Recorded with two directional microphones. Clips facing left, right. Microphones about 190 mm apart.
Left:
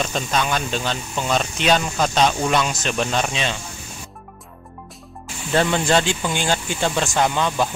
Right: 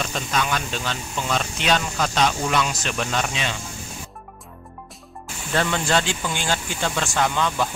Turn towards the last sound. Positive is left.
turn(degrees=20)  # may be behind; listen again after turning